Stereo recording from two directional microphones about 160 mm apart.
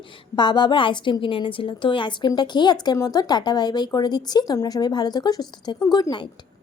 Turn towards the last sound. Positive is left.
turn(degrees=25)  # may be behind; listen again after turning